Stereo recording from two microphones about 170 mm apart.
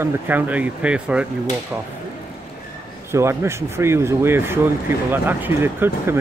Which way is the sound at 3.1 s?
15° right (ahead or behind).